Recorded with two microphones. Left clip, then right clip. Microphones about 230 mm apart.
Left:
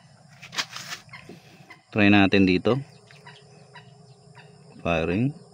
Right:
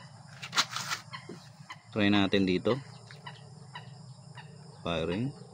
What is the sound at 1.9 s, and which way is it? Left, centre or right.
Speech, left.